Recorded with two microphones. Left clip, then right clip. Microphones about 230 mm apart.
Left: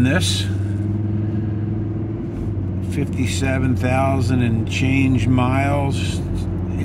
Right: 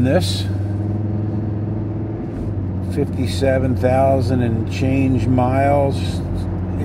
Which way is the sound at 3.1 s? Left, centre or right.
Left.